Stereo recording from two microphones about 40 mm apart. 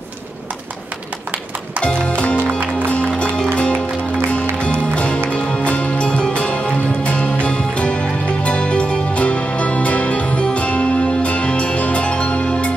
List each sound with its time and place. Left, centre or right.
1.8 s music: left
9.1 s music: left